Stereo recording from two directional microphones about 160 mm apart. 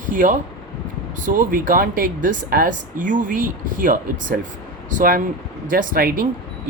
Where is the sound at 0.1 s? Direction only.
55° right (ahead or behind).